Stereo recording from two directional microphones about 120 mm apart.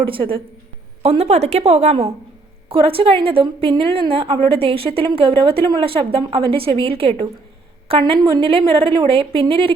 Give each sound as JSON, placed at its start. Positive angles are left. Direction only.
{"t": 0.0, "sound": "a woman's voice", "side_deg": -45}
{"t": 1.0, "sound": "speech", "side_deg": -60}
{"t": 2.6, "sound": "a woman's voice", "side_deg": -50}